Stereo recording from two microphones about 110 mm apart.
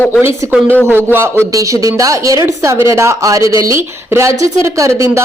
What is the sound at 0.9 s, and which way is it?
A woman's voice, 20° right (ahead or behind).